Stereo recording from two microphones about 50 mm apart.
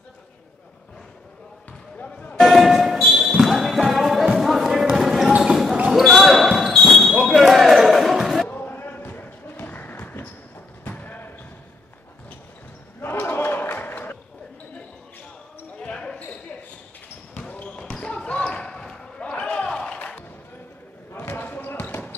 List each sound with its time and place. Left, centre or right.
1.7 s basketball bounce: left
2.3 s a sound: centre
4.4 s basketball bounce: centre
6.0 s basketball bounce: centre
8.5 s a sound: left
10.8 s basketball bounce: left
13.0 s basketball bounce: left
13.7 s a sound: left
15.8 s basketball bounce: centre
17.9 s basketball bounce: left
21.1 s basketball bounce: left